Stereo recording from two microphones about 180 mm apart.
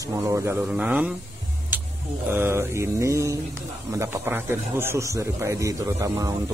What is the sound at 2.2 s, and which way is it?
A man's voice, 10° right (ahead or behind).